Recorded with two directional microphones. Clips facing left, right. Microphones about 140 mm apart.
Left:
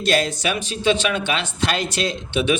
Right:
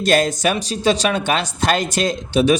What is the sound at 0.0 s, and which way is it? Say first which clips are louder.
A man's voice: right 4 dB; 45° right (ahead or behind).